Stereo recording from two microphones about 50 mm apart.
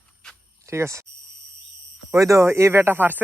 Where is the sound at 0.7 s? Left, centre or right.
Right.